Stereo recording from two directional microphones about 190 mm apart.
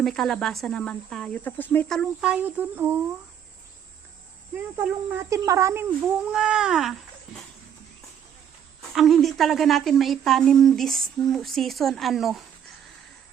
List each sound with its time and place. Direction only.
0.0 s speech: centre (ahead or behind)
4.5 s speech: 10° right (ahead or behind)
9.0 s speech: centre (ahead or behind)